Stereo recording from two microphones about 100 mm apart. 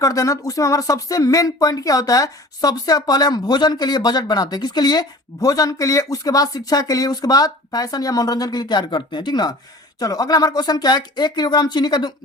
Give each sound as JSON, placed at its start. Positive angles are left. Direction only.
{"t": 0.0, "sound": "speech", "side_deg": 35}